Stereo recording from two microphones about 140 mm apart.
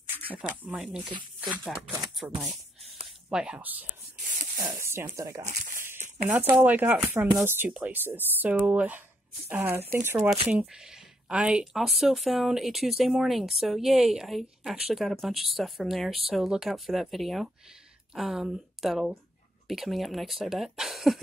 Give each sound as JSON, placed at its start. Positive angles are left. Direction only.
{"t": 0.7, "sound": "speech", "side_deg": -5}
{"t": 2.8, "sound": "a sound", "side_deg": -45}
{"t": 3.3, "sound": "speech", "side_deg": -5}
{"t": 5.4, "sound": "speech", "side_deg": -55}
{"t": 5.9, "sound": "a sound", "side_deg": -60}
{"t": 6.5, "sound": "speech", "side_deg": -10}